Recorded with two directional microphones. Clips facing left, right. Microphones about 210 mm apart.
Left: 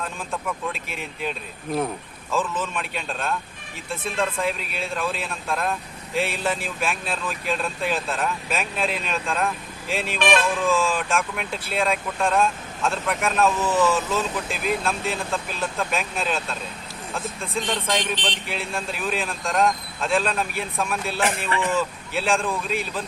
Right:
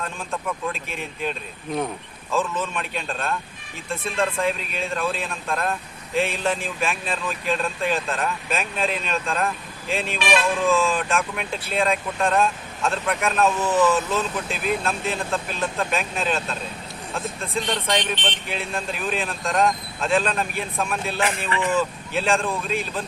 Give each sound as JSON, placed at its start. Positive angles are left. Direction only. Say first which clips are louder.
{"t": 0.0, "sound": "speech", "louder": "right 1 dB", "side_deg": 0}
{"t": 13.6, "sound": "speech", "louder": "right 1 dB", "side_deg": -15}
{"t": 14.1, "sound": "speech", "louder": "even", "side_deg": 0}